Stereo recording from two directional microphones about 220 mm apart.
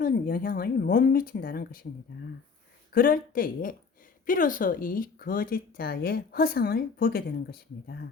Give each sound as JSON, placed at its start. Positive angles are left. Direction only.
{"t": 0.0, "sound": "speech", "side_deg": 40}
{"t": 2.9, "sound": "speech", "side_deg": 40}